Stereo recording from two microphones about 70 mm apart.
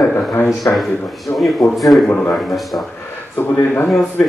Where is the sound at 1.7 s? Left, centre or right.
Centre.